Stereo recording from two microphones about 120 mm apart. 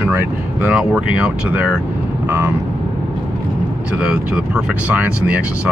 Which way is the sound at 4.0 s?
5° right (ahead or behind).